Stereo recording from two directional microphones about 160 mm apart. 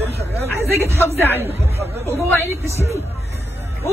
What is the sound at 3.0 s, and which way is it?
Music, 40° left (ahead or behind).